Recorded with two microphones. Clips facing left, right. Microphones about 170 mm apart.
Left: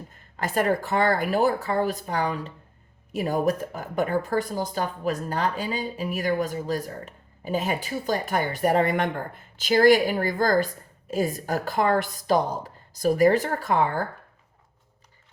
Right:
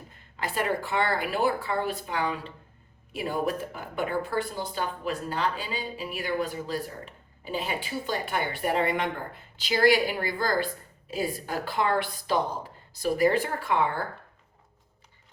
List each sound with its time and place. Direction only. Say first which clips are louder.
0.3 s speech: left 5 dB; 45° left (ahead or behind)